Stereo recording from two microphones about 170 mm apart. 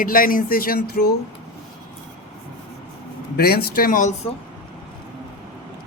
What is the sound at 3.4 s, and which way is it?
Speech, 65° left (ahead or behind).